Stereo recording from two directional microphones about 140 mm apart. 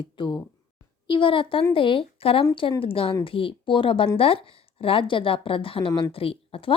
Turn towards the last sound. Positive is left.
turn(degrees=40)  # may be behind; listen again after turning